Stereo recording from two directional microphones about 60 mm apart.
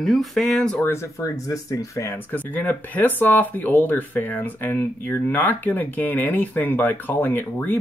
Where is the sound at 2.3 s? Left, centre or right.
Left.